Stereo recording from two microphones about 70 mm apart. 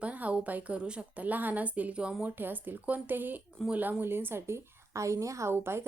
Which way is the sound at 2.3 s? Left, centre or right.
Right.